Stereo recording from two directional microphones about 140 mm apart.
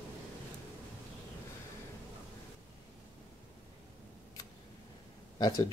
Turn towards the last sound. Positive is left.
turn(degrees=30)  # may be behind; listen again after turning